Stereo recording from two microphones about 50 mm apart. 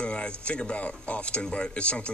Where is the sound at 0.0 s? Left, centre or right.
Left.